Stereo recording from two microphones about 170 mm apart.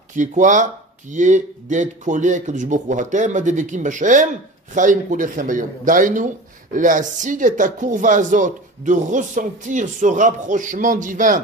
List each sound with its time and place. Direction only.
0.1 s speech: 50° right (ahead or behind)